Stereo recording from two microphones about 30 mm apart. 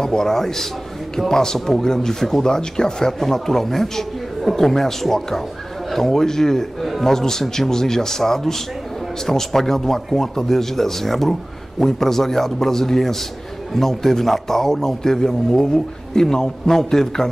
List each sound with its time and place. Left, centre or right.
0.0 s a man's voice: centre